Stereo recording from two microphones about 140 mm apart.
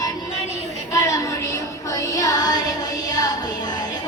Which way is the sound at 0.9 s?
25° left (ahead or behind).